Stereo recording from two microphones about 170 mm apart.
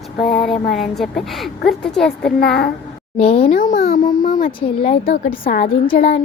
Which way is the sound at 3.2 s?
35° left (ahead or behind).